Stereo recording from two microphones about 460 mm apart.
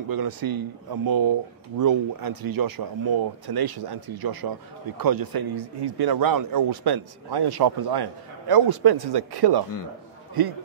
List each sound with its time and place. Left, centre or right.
0.1 s a man's voice: right